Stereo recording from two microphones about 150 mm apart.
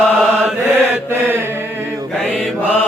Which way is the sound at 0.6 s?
15° right (ahead or behind).